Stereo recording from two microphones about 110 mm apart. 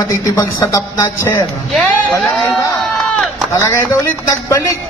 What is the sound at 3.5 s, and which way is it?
A man's voice, 25° left (ahead or behind).